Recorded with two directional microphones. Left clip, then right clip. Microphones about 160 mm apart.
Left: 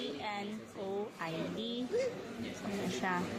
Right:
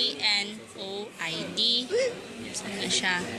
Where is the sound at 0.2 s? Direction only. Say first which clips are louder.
Right 14 dB; 20° left (ahead or behind).